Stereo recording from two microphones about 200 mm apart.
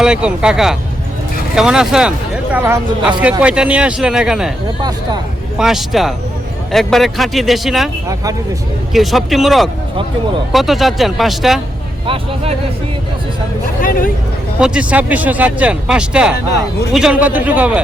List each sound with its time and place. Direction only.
0.0 s speech: 5° right (ahead or behind)
4.8 s speech: 20° right (ahead or behind)
5.5 s speech: centre (ahead or behind)
8.0 s speech: 15° right (ahead or behind)
8.9 s speech: centre (ahead or behind)
12.0 s speech: 25° right (ahead or behind)
13.8 s speech: 45° left (ahead or behind)
14.6 s speech: 5° right (ahead or behind)